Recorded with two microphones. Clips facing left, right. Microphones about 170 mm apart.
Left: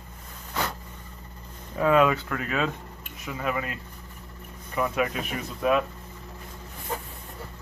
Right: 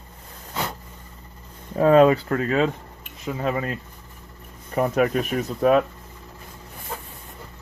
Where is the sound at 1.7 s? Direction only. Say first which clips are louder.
Right 6 dB; 35° right (ahead or behind).